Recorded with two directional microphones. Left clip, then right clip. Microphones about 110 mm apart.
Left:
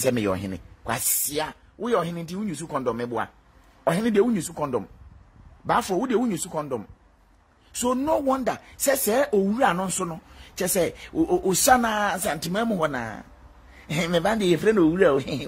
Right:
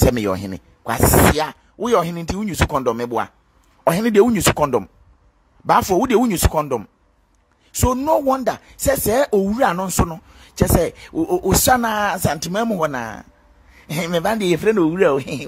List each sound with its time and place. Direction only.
0.1 s speech: 40° right (ahead or behind); by 6.9 s 65° right (ahead or behind)
7.7 s a woman's voice: 55° right (ahead or behind)